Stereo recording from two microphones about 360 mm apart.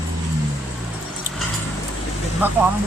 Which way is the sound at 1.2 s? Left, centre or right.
Centre.